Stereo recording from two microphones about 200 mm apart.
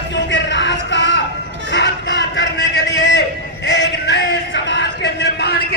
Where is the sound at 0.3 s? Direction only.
65° left (ahead or behind).